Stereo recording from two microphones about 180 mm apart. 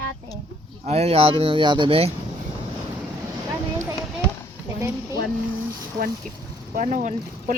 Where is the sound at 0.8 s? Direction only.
35° right (ahead or behind).